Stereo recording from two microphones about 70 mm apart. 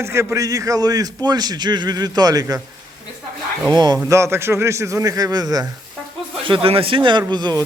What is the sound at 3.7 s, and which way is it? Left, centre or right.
Speech, right.